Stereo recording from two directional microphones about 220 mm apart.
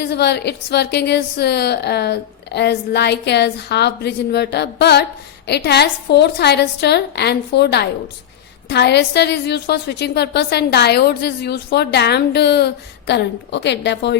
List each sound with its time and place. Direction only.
0.0 s a woman's voice: 50° left (ahead or behind)